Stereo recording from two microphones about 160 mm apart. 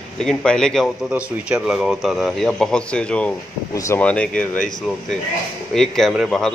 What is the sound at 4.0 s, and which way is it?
Speech, 5° left (ahead or behind).